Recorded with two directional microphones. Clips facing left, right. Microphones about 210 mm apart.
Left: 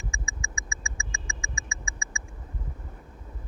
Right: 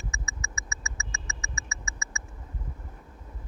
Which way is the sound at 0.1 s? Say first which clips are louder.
Left 1 dB; 15° left (ahead or behind).